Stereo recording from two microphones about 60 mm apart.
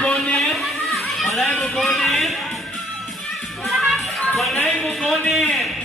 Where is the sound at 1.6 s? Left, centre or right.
Centre.